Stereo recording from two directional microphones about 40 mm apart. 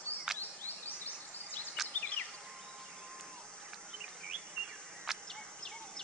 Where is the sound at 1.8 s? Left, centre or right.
Centre.